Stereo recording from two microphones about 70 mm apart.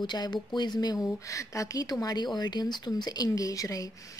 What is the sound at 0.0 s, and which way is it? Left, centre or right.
Speech, left.